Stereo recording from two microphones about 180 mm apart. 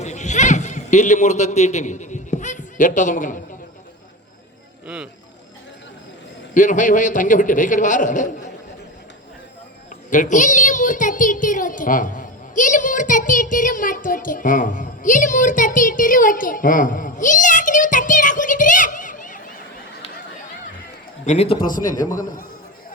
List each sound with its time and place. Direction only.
0.0 s a sound: 40° left (ahead or behind)
6.5 s a woman's voice: 45° left (ahead or behind)
10.1 s a woman's voice: 45° left (ahead or behind)
21.2 s speech: 35° left (ahead or behind)
21.7 s a woman's voice: 45° left (ahead or behind)